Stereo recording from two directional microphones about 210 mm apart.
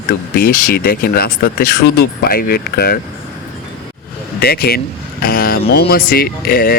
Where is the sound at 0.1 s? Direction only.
45° left (ahead or behind).